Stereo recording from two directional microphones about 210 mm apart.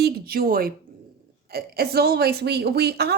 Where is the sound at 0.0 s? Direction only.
45° right (ahead or behind).